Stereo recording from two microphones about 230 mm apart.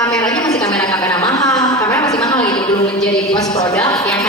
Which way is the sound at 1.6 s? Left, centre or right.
Centre.